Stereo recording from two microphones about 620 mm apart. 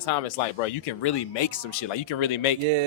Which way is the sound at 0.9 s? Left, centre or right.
Left.